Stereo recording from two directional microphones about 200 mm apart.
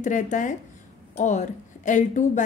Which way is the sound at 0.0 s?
40° left (ahead or behind).